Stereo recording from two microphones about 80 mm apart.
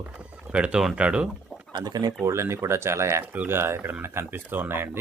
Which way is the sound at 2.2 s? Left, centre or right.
Right.